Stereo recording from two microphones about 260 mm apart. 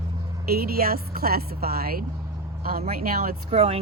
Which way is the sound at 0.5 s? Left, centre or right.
Right.